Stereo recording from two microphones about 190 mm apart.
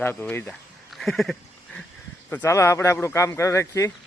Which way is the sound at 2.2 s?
15° left (ahead or behind).